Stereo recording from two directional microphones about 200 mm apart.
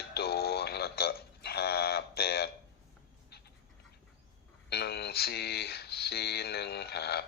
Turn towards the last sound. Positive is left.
turn(degrees=55)  # may be behind; listen again after turning